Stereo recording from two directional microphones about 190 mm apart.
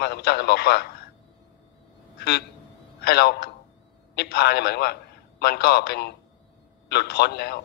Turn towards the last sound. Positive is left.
turn(degrees=55)  # may be behind; listen again after turning